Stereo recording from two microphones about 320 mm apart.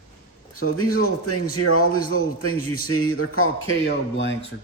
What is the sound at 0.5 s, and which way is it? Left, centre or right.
A man's voice, left.